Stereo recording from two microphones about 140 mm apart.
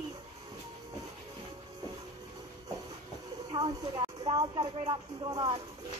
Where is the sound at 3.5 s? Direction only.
30° right (ahead or behind).